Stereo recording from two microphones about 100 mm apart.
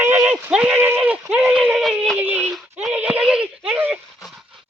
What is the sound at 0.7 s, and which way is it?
Speech, 20° right (ahead or behind).